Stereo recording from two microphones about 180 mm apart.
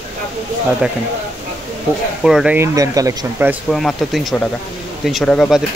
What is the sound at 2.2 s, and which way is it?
Speech, 5° right (ahead or behind).